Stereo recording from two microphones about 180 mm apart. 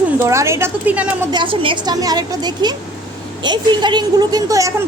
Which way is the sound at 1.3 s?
30° right (ahead or behind).